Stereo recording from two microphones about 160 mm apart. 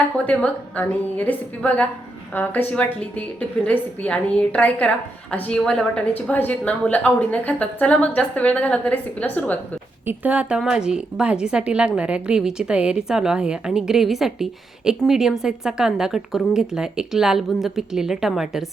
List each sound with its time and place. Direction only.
0.3 s a woman's voice: 10° left (ahead or behind)
10.1 s a woman's voice: 10° right (ahead or behind)